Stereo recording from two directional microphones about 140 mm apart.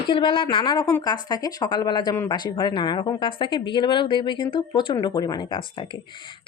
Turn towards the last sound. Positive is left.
turn(degrees=35)  # may be behind; listen again after turning